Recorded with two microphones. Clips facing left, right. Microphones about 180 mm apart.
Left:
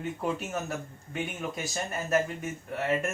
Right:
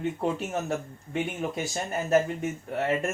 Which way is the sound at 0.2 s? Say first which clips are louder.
Right 3 dB; 30° right (ahead or behind).